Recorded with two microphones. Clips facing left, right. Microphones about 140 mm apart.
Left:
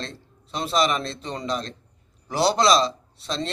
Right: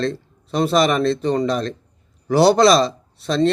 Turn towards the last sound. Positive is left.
turn(degrees=-55)  # may be behind; listen again after turning